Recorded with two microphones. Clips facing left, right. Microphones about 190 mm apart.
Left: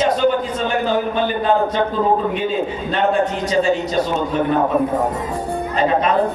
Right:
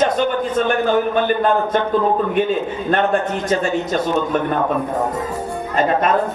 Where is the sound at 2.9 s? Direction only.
55° right (ahead or behind).